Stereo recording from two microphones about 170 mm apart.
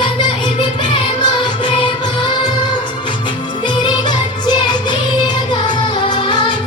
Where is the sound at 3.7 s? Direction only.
25° left (ahead or behind).